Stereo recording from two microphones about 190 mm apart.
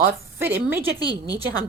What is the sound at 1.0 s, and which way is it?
Speech, 20° left (ahead or behind).